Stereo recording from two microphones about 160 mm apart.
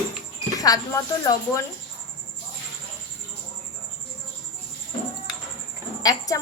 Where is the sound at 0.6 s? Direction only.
20° left (ahead or behind).